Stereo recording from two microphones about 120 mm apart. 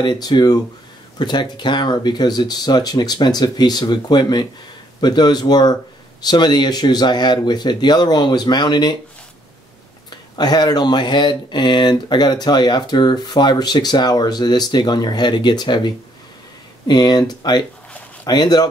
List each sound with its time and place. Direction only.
0.0 s speech: 35° left (ahead or behind)
10.3 s speech: 35° left (ahead or behind)